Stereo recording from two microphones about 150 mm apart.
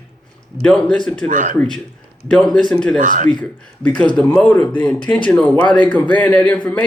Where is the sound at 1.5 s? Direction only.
5° left (ahead or behind).